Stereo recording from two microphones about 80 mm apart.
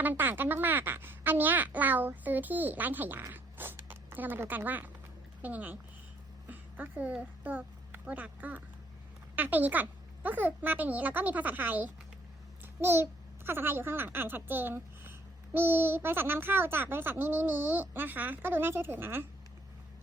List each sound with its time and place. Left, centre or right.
0.0 s a child's voice: right